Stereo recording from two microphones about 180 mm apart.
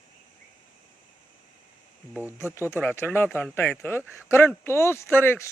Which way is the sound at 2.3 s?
15° left (ahead or behind).